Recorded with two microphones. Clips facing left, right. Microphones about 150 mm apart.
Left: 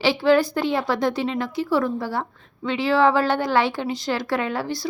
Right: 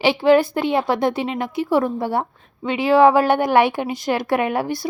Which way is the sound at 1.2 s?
15° right (ahead or behind).